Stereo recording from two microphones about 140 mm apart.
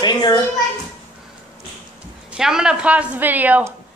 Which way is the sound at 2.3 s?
5° right (ahead or behind).